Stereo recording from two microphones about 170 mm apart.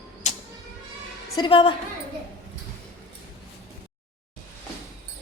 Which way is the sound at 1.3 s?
30° left (ahead or behind).